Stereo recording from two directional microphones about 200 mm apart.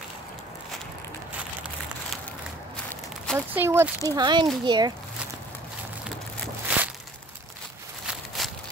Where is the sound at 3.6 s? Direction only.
10° right (ahead or behind).